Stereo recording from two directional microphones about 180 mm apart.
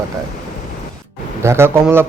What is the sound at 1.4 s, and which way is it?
Speech, 15° right (ahead or behind).